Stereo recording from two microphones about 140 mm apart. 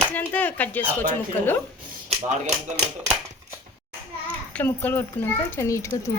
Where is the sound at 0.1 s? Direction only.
10° left (ahead or behind).